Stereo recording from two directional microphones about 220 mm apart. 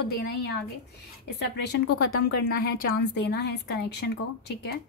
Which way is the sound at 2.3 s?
50° left (ahead or behind).